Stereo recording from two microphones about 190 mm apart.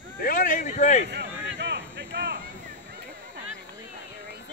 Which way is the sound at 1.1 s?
65° right (ahead or behind).